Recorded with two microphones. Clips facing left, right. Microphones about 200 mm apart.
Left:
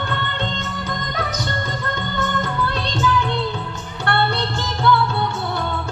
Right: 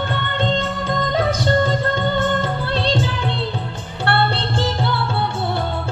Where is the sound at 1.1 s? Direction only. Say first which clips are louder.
Right 10 dB; 30° right (ahead or behind).